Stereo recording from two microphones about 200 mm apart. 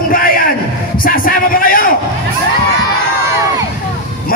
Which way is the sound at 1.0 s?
45° left (ahead or behind).